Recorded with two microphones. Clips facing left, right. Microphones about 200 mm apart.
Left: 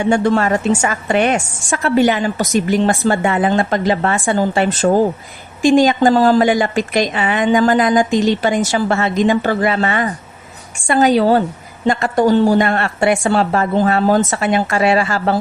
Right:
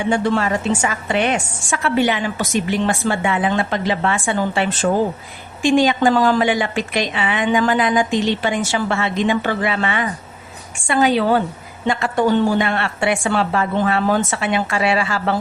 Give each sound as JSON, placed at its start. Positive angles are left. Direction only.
{"t": 0.1, "sound": "a woman's voice", "side_deg": 45}